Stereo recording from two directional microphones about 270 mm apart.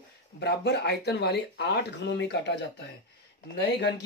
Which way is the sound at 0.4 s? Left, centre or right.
Left.